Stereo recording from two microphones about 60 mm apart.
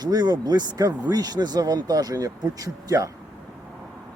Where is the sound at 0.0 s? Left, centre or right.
Right.